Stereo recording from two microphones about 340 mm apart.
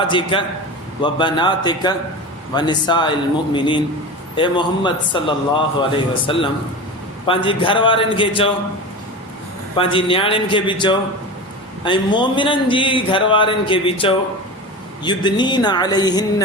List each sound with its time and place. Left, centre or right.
0.1 s speech: centre
9.7 s speech: centre